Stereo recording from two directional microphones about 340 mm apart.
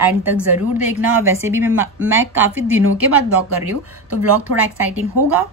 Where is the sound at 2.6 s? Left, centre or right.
Right.